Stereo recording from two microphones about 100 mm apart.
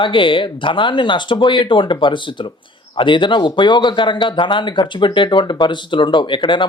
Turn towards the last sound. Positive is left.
turn(degrees=55)  # may be behind; listen again after turning